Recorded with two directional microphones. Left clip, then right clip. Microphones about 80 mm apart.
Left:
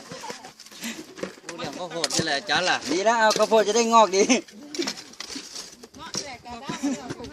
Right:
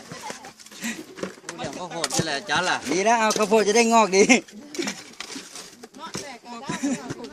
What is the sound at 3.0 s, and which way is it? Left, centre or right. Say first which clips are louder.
Speech: right 1 dB; right.